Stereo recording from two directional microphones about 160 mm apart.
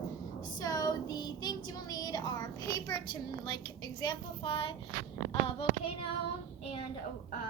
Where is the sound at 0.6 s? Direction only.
25° left (ahead or behind).